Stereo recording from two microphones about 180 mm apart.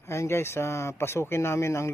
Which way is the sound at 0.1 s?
15° left (ahead or behind).